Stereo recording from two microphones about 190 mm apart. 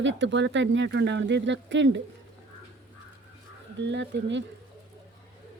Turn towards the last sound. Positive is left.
turn(degrees=-70)  # may be behind; listen again after turning